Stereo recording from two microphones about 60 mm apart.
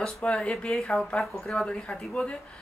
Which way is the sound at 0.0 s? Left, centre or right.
Centre.